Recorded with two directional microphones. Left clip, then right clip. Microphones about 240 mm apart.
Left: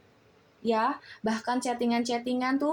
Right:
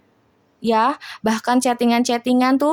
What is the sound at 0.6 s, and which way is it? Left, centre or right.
Speech, right.